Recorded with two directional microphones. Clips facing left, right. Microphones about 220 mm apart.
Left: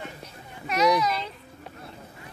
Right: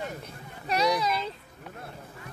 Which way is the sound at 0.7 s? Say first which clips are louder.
Left 3 dB; 30° right (ahead or behind).